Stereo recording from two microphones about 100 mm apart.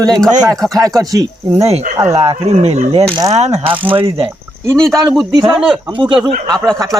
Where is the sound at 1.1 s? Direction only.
35° right (ahead or behind).